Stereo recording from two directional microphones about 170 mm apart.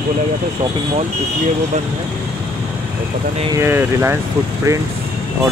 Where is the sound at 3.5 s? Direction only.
15° right (ahead or behind).